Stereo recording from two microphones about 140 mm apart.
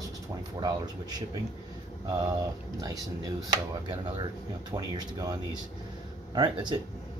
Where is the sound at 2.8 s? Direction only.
30° right (ahead or behind).